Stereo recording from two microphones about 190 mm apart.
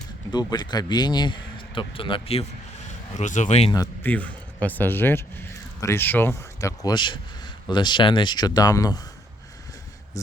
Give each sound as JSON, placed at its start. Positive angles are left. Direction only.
{"t": 0.3, "sound": "a man's voice", "side_deg": 20}
{"t": 3.7, "sound": "a man's voice", "side_deg": 20}
{"t": 4.1, "sound": "speech", "side_deg": 10}